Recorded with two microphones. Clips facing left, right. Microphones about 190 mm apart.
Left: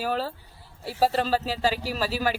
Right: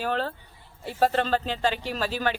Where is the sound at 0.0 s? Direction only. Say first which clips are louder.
Even; 5° left (ahead or behind).